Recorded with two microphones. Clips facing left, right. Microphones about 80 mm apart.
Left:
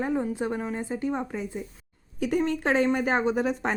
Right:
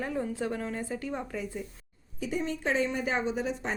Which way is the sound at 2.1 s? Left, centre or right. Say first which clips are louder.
Left 7 dB; left.